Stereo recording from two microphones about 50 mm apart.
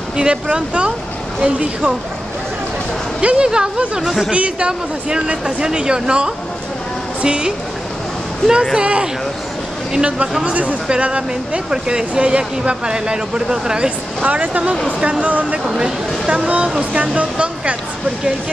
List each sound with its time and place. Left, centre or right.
0.2 s speech: centre
3.2 s speech: right
8.7 s speech: right
15.6 s speech: centre